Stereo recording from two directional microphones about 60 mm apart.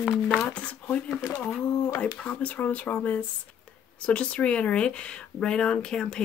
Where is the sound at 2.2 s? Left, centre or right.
Left.